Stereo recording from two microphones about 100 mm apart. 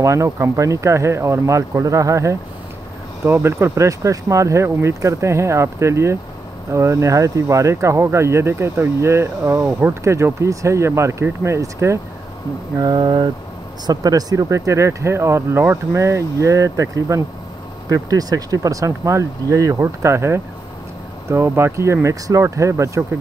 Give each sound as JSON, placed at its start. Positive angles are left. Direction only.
{"t": 0.0, "sound": "speech", "side_deg": -30}
{"t": 12.7, "sound": "speech", "side_deg": -45}
{"t": 13.8, "sound": "speech", "side_deg": -40}